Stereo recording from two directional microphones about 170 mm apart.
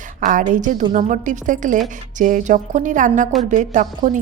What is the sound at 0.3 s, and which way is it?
A woman's voice, 50° right (ahead or behind).